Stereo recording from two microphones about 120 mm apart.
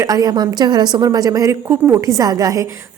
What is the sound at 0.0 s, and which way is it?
A woman's voice, 30° right (ahead or behind).